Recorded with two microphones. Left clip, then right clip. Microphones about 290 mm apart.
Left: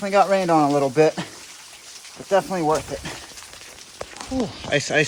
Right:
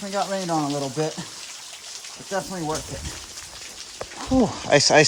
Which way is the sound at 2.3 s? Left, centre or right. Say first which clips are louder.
Left 8 dB; centre.